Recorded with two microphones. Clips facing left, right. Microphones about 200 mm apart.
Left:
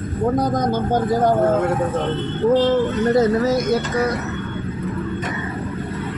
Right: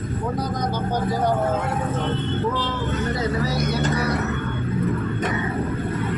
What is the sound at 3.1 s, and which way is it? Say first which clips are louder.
Speech: left 8 dB; 45° left (ahead or behind).